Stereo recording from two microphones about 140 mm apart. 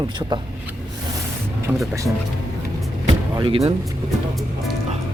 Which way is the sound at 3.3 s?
35° right (ahead or behind).